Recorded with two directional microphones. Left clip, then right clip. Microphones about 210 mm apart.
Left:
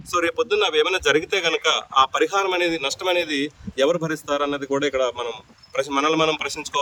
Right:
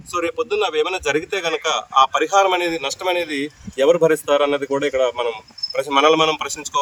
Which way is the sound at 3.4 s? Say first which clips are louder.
Even; 10° right (ahead or behind).